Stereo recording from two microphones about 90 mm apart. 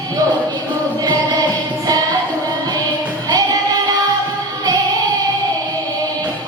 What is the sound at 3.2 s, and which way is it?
Music, 45° right (ahead or behind).